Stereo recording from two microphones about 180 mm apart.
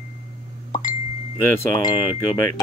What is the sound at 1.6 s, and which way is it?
Chime, 25° left (ahead or behind).